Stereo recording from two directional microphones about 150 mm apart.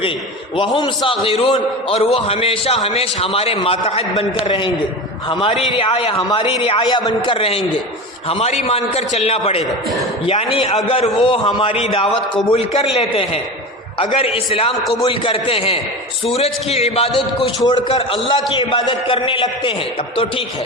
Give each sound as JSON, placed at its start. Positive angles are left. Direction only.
{"t": 0.5, "sound": "a man's voice", "side_deg": 35}
{"t": 5.3, "sound": "a man's voice", "side_deg": 35}